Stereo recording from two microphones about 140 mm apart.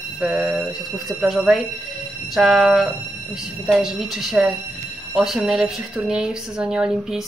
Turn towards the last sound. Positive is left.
turn(degrees=-5)  # may be behind; listen again after turning